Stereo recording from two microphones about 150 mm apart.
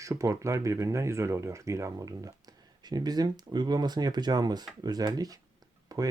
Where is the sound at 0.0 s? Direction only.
20° right (ahead or behind).